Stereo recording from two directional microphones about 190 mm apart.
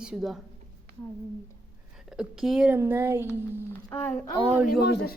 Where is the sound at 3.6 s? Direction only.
10° left (ahead or behind).